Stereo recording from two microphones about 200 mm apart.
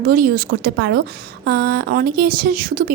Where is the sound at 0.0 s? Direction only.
45° right (ahead or behind).